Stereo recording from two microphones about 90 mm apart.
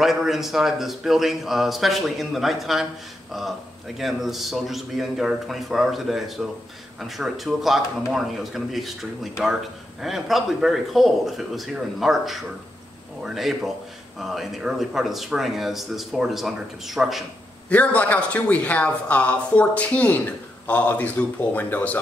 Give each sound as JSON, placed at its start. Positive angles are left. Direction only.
{"t": 0.0, "sound": "speech", "side_deg": -5}
{"t": 4.0, "sound": "speech", "side_deg": 0}
{"t": 17.6, "sound": "a man's voice", "side_deg": 15}